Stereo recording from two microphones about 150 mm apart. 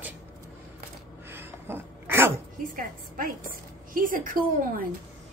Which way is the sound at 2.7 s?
70° right (ahead or behind).